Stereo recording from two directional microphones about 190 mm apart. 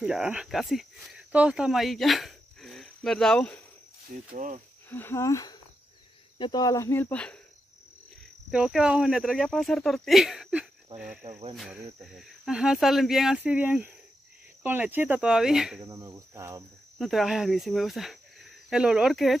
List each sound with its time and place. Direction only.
0.0 s speech: 5° right (ahead or behind)
4.1 s cricket: 45° right (ahead or behind)
4.8 s speech: 10° left (ahead or behind)
8.5 s speech: centre (ahead or behind)
10.9 s cricket: 25° right (ahead or behind)
11.5 s speech: centre (ahead or behind)
15.8 s cricket: 20° right (ahead or behind)
17.0 s speech: centre (ahead or behind)